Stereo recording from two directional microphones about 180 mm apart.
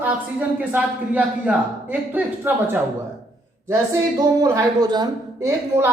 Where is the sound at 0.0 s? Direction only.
10° right (ahead or behind).